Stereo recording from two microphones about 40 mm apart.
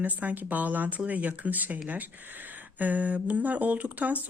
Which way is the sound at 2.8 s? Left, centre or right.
Right.